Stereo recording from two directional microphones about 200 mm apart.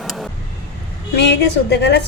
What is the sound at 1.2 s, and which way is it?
Speech, 60° left (ahead or behind).